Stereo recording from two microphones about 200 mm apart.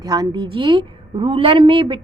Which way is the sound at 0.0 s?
20° right (ahead or behind).